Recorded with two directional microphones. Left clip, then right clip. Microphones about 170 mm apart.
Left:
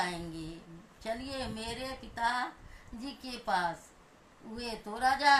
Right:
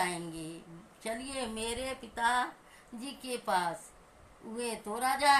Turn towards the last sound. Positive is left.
turn(degrees=0)  # may be behind; listen again after turning